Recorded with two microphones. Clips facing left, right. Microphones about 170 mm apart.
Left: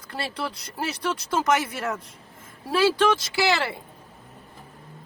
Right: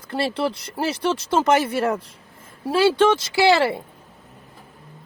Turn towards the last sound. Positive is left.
turn(degrees=-25)  # may be behind; listen again after turning